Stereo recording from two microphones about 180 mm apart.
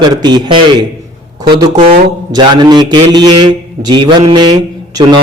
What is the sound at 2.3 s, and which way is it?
A man's voice, 25° right (ahead or behind).